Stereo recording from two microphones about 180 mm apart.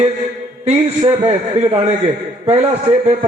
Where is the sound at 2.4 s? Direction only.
35° right (ahead or behind).